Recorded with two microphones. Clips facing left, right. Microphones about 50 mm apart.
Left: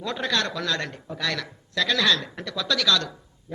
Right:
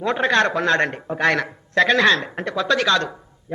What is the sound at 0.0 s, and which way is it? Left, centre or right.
A man's voice, right.